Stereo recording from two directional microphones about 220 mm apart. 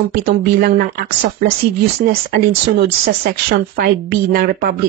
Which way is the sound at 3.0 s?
45° right (ahead or behind).